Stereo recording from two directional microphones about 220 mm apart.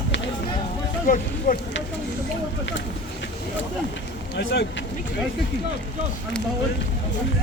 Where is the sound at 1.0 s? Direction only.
40° left (ahead or behind).